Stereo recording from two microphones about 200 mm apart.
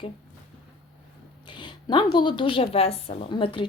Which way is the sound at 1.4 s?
25° left (ahead or behind).